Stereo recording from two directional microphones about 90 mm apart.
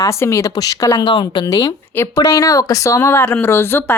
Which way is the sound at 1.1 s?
60° left (ahead or behind).